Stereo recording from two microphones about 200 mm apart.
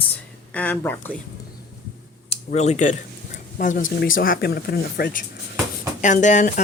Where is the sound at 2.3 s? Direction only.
30° left (ahead or behind).